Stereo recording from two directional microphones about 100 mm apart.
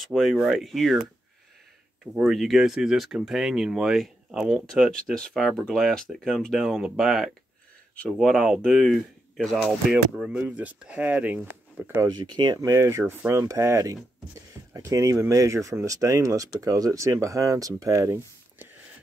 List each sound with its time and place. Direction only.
0.0 s speech: centre (ahead or behind)
2.2 s speech: centre (ahead or behind); by 12.0 s 20° right (ahead or behind)
12.1 s speech: 50° right (ahead or behind)
12.6 s speech: 25° right (ahead or behind)